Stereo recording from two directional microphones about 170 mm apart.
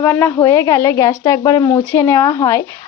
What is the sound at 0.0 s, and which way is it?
Speech, 15° left (ahead or behind).